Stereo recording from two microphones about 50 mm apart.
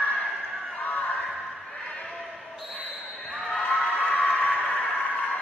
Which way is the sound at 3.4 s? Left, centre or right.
Left.